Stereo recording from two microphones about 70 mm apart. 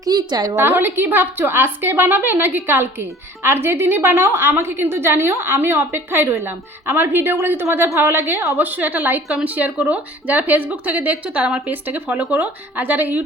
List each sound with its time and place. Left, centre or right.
0.0 s a woman's voice: right
0.5 s a woman's voice: right; by 11.7 s centre
11.7 s a woman's voice: right